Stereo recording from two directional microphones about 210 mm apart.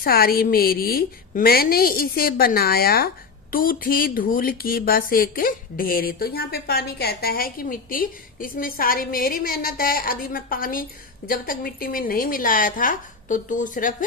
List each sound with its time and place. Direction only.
0.0 s speech: 45° left (ahead or behind)